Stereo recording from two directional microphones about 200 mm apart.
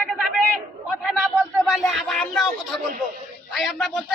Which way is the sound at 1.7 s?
Centre (ahead or behind).